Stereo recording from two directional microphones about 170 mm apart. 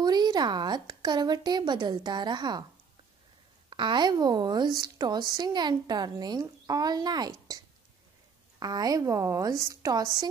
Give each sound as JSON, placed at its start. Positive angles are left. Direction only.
{"t": 0.0, "sound": "a woman's voice", "side_deg": -25}
{"t": 3.7, "sound": "a woman's voice", "side_deg": -25}